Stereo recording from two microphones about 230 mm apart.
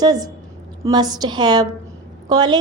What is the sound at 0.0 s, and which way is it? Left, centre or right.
A woman's voice, centre.